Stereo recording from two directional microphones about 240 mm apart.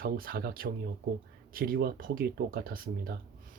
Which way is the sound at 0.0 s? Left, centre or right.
Right.